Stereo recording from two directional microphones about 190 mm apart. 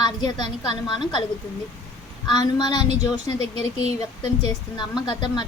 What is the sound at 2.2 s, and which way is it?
A woman's voice, 20° left (ahead or behind).